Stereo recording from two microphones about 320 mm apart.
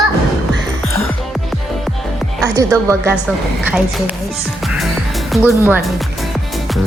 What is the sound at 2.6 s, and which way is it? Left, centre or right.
Speech, centre.